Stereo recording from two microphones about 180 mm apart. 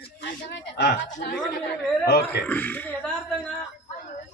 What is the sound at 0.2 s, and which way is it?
Speech, 75° left (ahead or behind).